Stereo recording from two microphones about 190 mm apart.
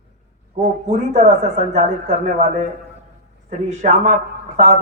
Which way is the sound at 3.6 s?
40° right (ahead or behind).